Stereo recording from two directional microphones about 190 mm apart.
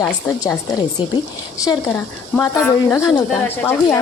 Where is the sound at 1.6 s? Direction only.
10° left (ahead or behind).